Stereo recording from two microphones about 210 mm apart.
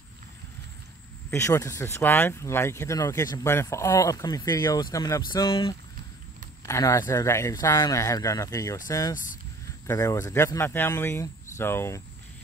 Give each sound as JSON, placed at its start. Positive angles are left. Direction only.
{"t": 1.3, "sound": "speech", "side_deg": 15}